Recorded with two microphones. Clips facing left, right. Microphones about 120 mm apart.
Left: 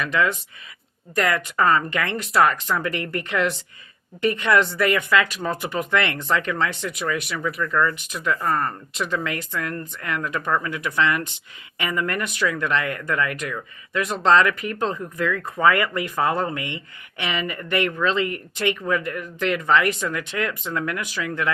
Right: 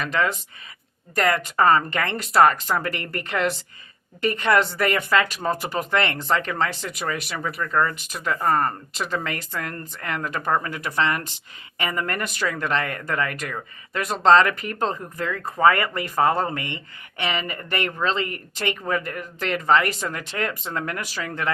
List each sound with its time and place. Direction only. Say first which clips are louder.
0.0 s speech: left 1 dB; 35° right (ahead or behind)
4.4 s speech: right 1 dB; 40° right (ahead or behind); by 7.9 s 25° right (ahead or behind)
8.1 s speech: right 1 dB; 35° right (ahead or behind)